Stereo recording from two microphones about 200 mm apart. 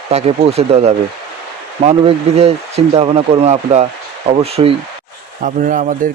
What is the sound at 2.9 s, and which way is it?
Speech, 30° right (ahead or behind).